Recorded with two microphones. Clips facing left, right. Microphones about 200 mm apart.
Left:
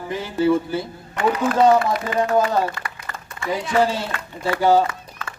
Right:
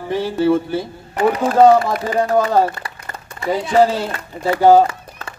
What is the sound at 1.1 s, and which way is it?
Speech, 35° right (ahead or behind).